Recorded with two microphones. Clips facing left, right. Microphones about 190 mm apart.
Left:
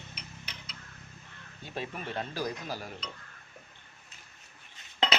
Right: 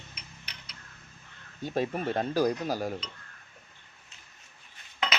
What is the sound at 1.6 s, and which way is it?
Speech, 40° right (ahead or behind).